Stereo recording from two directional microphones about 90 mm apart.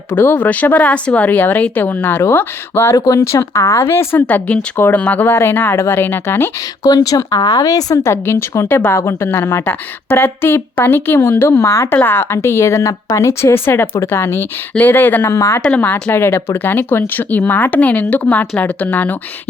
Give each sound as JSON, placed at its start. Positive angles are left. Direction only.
{"t": 0.1, "sound": "speech", "side_deg": 20}
{"t": 6.8, "sound": "speech", "side_deg": 45}
{"t": 8.1, "sound": "speech", "side_deg": 30}
{"t": 15.6, "sound": "speech", "side_deg": 15}